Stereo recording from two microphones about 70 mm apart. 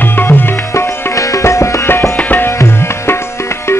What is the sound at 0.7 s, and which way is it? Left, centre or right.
Music, left.